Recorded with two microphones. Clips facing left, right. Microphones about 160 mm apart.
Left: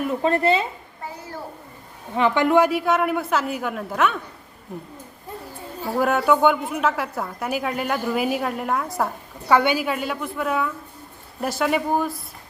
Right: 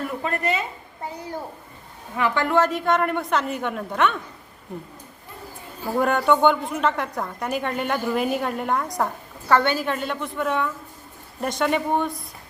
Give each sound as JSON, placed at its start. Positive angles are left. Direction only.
{"t": 0.0, "sound": "speech", "side_deg": 25}
{"t": 2.1, "sound": "a woman's voice", "side_deg": 20}
{"t": 6.0, "sound": "a woman's voice", "side_deg": 5}